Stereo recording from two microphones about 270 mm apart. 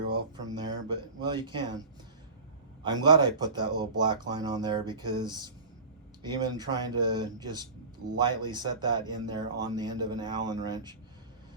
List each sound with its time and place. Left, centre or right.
0.1 s speech: centre
2.8 s speech: centre